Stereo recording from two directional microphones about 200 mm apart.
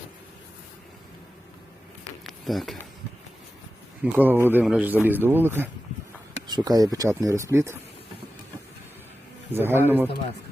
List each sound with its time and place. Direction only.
2.2 s a sound: centre (ahead or behind)
4.0 s speech: 10° right (ahead or behind)
9.5 s speech: 10° right (ahead or behind)